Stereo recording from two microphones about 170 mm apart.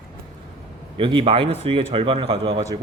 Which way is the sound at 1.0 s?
30° right (ahead or behind).